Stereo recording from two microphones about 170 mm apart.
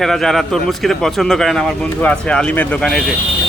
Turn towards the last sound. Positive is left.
turn(degrees=0)  # may be behind; listen again after turning